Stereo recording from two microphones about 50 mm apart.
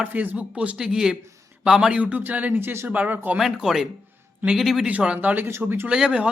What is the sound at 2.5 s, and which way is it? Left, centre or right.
Speech, right.